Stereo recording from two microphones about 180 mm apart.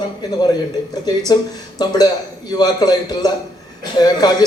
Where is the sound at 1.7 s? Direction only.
20° left (ahead or behind).